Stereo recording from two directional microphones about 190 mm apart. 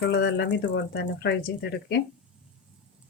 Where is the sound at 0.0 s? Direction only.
65° left (ahead or behind).